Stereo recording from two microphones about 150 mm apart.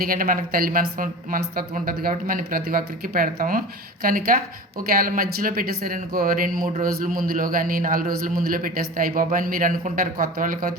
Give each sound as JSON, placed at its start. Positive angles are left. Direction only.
{"t": 0.0, "sound": "a man's voice", "side_deg": -70}